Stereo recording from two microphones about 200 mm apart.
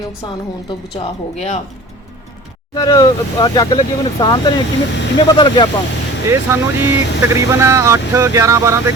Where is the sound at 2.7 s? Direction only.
20° left (ahead or behind).